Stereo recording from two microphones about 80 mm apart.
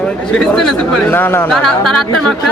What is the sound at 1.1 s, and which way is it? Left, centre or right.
Speech, left.